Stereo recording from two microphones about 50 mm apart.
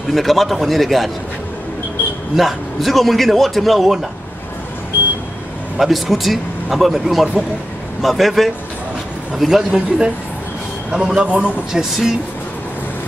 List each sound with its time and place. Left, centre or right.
0.1 s speech: centre
2.3 s speech: centre
5.8 s a man's voice: centre
9.8 s a man's voice: right
11.7 s speech: centre